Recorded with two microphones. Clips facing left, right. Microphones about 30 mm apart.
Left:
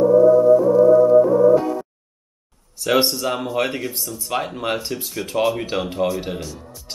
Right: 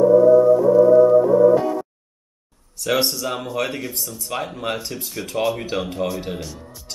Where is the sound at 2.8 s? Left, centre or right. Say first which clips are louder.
Left 3 dB; centre.